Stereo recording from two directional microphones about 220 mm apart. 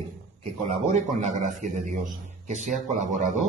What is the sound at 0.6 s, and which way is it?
A man's voice, 35° right (ahead or behind).